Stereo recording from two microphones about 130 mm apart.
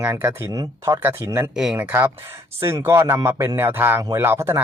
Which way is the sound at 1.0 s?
15° right (ahead or behind).